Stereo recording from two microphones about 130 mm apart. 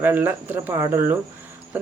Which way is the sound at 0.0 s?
15° right (ahead or behind).